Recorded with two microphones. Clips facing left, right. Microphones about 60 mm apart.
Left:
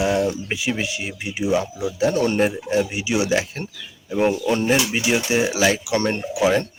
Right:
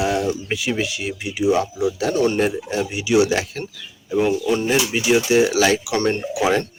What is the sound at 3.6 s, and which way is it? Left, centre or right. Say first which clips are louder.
Speech: right 1 dB; left.